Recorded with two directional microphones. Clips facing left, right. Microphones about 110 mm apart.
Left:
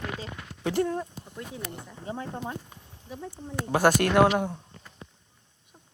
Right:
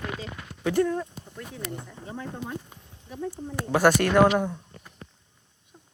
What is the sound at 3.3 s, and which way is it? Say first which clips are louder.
Speech: right 1 dB; 45° left (ahead or behind).